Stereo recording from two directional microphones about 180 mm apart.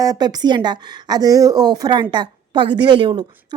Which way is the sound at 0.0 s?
20° right (ahead or behind).